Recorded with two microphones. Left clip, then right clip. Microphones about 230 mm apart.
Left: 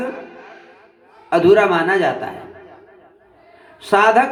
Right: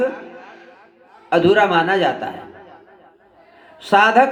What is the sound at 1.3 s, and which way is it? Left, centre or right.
A man's voice, right.